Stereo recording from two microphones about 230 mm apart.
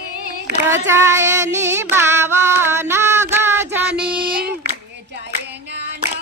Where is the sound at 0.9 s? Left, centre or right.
Centre.